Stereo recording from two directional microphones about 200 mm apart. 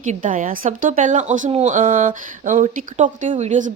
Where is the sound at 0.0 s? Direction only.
40° right (ahead or behind).